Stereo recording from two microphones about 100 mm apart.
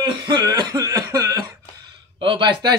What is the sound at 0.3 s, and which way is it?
Cough, 45° right (ahead or behind).